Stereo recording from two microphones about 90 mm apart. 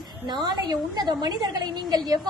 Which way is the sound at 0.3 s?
50° right (ahead or behind).